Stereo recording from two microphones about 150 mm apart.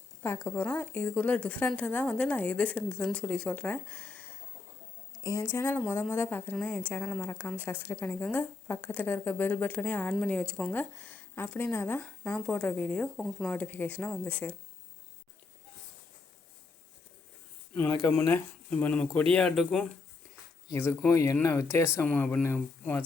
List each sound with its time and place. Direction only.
0.2 s a woman's voice: 15° left (ahead or behind)
5.2 s a woman's voice: 20° left (ahead or behind)
18.0 s a woman's voice: 15° left (ahead or behind)
20.7 s a woman's voice: 15° left (ahead or behind)